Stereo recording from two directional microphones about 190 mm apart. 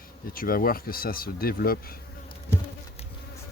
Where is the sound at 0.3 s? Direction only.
50° left (ahead or behind).